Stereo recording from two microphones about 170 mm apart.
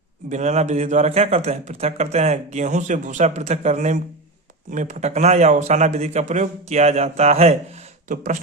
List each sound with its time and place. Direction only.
0.3 s a man's voice: 45° right (ahead or behind)
8.0 s speech: 50° right (ahead or behind)